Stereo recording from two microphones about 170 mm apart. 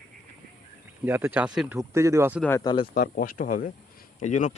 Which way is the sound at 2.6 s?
25° left (ahead or behind).